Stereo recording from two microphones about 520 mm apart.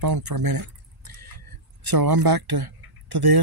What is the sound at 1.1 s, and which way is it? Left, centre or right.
Vehicle, right.